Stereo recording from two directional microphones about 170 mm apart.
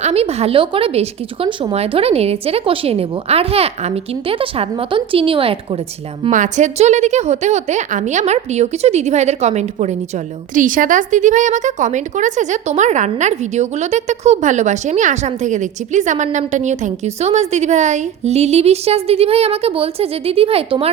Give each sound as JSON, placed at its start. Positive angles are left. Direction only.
{"t": 0.0, "sound": "a woman's voice", "side_deg": -35}
{"t": 6.3, "sound": "a woman's voice", "side_deg": -45}
{"t": 10.5, "sound": "speech", "side_deg": -50}